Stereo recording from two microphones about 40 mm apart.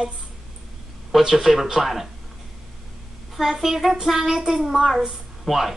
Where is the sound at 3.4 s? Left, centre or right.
Centre.